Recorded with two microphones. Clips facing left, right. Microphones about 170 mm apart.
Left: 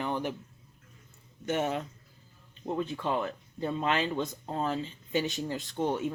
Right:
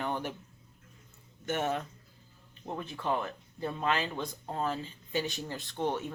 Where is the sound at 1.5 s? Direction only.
15° left (ahead or behind).